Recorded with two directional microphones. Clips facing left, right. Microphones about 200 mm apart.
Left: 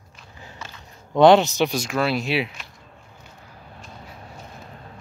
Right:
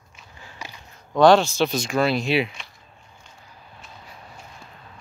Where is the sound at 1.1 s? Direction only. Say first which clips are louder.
Left 1 dB; 20° left (ahead or behind); by 2.7 s centre (ahead or behind).